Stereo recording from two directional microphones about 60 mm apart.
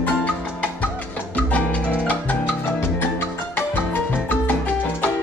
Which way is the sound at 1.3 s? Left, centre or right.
Left.